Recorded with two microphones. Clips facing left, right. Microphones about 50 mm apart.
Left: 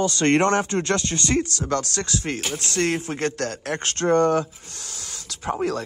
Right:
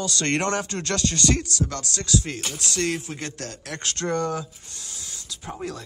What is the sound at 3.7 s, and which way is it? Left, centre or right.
Speech, left.